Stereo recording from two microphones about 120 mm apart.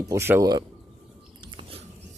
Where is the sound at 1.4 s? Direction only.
45° right (ahead or behind).